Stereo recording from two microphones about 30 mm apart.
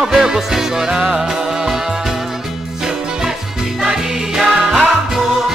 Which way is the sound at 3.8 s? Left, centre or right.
Centre.